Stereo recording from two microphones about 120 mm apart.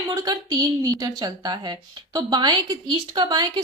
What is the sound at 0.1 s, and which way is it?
A woman's voice, 25° right (ahead or behind).